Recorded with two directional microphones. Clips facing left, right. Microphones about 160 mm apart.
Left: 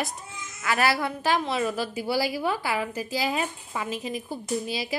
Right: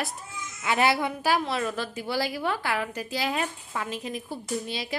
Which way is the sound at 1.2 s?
5° right (ahead or behind).